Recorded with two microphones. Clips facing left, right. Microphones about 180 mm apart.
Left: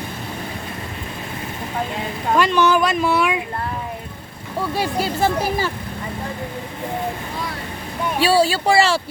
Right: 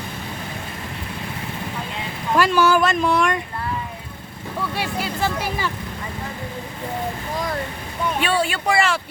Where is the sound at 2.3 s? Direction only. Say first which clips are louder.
Even; 5° right (ahead or behind).